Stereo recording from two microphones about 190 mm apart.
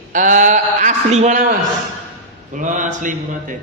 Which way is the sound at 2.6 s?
40° right (ahead or behind).